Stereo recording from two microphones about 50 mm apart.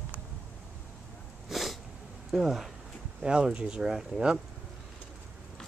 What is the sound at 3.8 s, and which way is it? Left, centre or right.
Speech, centre.